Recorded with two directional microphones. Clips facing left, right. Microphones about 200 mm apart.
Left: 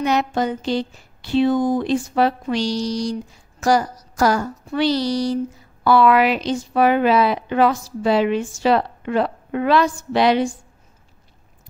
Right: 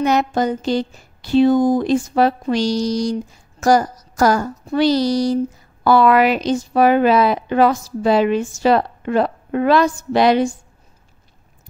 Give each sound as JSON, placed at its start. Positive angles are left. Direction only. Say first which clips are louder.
{"t": 0.0, "sound": "a woman's voice", "louder": "right 3 dB", "side_deg": -45}